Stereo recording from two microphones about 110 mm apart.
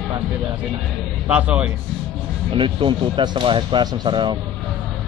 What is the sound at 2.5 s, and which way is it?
Speech, 50° right (ahead or behind).